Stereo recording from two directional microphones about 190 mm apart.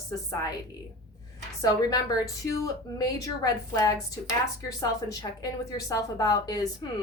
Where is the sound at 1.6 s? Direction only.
20° left (ahead or behind).